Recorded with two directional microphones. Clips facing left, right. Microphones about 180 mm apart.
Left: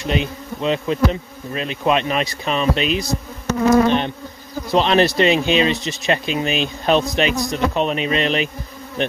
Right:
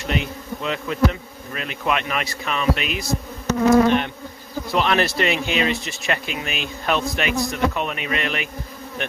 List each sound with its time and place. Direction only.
0.0 s speech: 20° left (ahead or behind)